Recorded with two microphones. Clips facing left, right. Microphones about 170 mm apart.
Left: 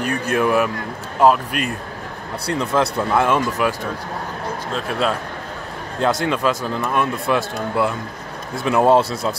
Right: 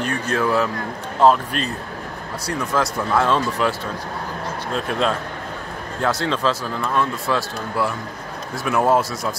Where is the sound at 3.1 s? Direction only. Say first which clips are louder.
Even; 15° left (ahead or behind).